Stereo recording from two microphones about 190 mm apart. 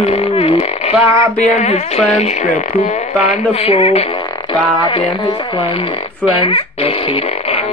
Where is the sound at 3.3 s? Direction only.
30° left (ahead or behind).